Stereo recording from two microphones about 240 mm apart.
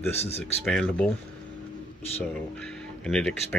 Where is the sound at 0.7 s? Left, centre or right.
Centre.